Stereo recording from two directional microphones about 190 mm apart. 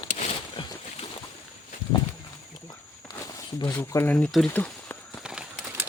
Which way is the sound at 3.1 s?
20° left (ahead or behind).